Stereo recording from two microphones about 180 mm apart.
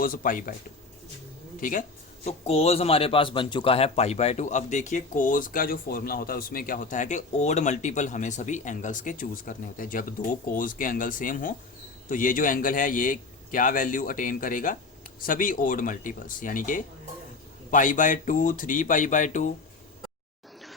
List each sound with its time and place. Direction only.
0.0 s a man's voice: 50° left (ahead or behind)
1.6 s a man's voice: 50° left (ahead or behind)
2.2 s a man's voice: 35° left (ahead or behind)